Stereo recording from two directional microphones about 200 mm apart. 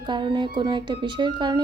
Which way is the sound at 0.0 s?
25° right (ahead or behind).